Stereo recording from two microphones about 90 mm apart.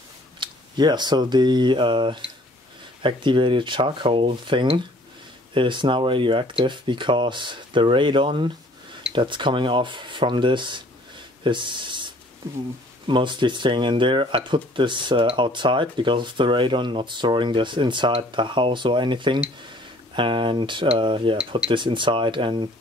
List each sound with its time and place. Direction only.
0.4 s speech: 55° right (ahead or behind)